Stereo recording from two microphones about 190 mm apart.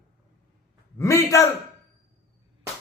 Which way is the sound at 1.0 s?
15° left (ahead or behind).